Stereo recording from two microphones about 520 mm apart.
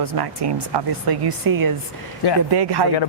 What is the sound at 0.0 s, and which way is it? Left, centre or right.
Speech, right.